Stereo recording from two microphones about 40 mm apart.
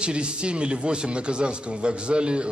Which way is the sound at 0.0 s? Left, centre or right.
Right.